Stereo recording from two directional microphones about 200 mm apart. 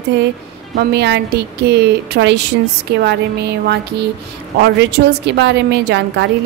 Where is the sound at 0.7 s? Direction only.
55° right (ahead or behind).